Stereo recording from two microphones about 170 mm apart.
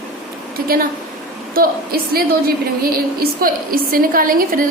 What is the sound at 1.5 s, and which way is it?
A woman's voice, 60° right (ahead or behind).